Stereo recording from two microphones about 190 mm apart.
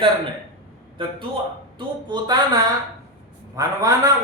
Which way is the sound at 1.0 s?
25° right (ahead or behind).